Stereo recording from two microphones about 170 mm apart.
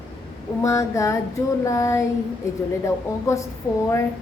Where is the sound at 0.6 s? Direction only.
15° left (ahead or behind).